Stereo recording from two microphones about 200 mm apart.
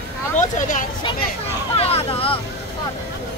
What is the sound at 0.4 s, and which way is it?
Speech, 40° left (ahead or behind).